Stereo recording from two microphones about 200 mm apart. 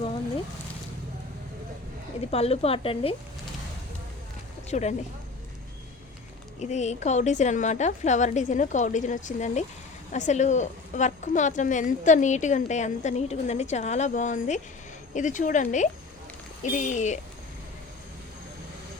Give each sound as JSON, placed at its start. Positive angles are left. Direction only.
{"t": 2.3, "sound": "speech", "side_deg": 30}
{"t": 4.7, "sound": "a woman's voice", "side_deg": 35}
{"t": 6.6, "sound": "a woman's voice", "side_deg": 35}